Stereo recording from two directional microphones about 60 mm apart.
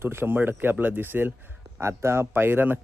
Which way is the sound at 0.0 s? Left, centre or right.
Right.